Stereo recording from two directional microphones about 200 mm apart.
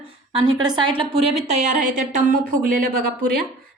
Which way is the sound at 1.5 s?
40° right (ahead or behind).